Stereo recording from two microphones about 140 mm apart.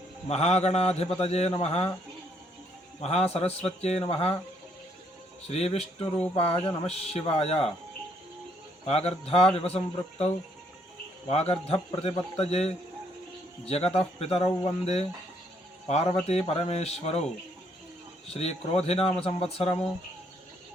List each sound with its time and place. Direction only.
0.3 s a man's voice: 50° left (ahead or behind)
3.0 s a man's voice: 50° left (ahead or behind)
5.5 s a man's voice: 50° left (ahead or behind)
8.9 s a man's voice: 50° left (ahead or behind)
18.3 s a man's voice: 45° left (ahead or behind)